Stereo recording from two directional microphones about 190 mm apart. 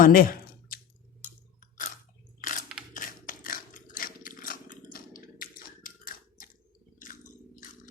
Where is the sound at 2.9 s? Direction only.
45° left (ahead or behind).